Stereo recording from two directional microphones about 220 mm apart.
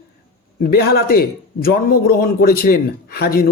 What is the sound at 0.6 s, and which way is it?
Speech, 45° left (ahead or behind).